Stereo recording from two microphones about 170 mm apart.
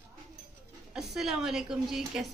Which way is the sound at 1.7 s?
5° right (ahead or behind).